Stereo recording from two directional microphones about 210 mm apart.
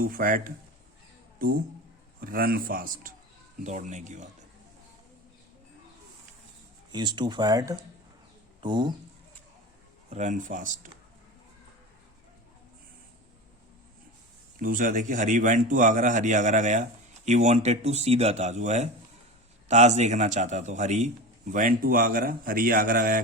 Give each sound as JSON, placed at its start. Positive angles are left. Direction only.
{"t": 0.0, "sound": "a man's voice", "side_deg": -40}
{"t": 2.2, "sound": "a man's voice", "side_deg": -40}
{"t": 6.9, "sound": "speech", "side_deg": -20}
{"t": 10.1, "sound": "a man's voice", "side_deg": -35}
{"t": 14.6, "sound": "a man's voice", "side_deg": -40}